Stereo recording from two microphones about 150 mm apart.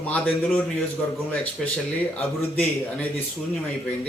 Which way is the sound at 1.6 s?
Centre (ahead or behind).